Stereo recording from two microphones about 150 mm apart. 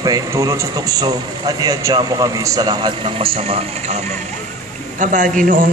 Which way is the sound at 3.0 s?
40° right (ahead or behind).